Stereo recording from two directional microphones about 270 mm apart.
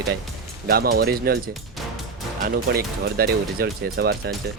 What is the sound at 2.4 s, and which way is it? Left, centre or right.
Speech, right.